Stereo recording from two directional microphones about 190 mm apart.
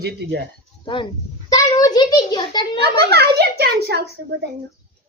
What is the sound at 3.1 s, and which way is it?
A child's voice, 60° right (ahead or behind).